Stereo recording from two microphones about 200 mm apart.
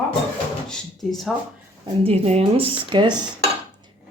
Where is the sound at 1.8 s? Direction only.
30° right (ahead or behind).